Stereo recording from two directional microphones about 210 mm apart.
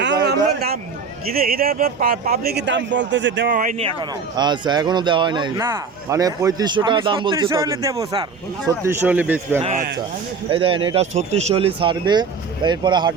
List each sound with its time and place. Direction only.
1.3 s speech: 45° right (ahead or behind)
3.5 s speech: 40° right (ahead or behind)
4.4 s speech: 20° right (ahead or behind)
9.6 s speech: 35° right (ahead or behind)
10.5 s speech: 25° right (ahead or behind)